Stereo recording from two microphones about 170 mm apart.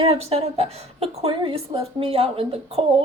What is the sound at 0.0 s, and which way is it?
A woman's voice, 35° right (ahead or behind).